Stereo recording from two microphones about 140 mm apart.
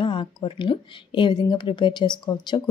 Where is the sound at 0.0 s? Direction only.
35° left (ahead or behind).